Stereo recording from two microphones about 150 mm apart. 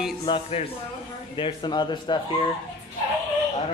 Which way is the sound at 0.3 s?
25° left (ahead or behind).